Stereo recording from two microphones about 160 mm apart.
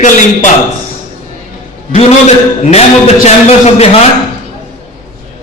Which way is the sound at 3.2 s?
40° left (ahead or behind).